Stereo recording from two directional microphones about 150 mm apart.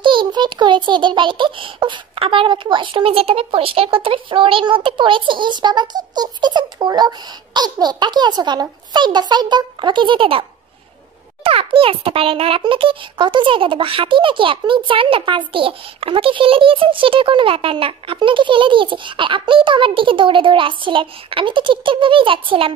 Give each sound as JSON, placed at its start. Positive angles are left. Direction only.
{"t": 0.0, "sound": "a child's voice", "side_deg": -35}
{"t": 11.4, "sound": "a child's voice", "side_deg": -40}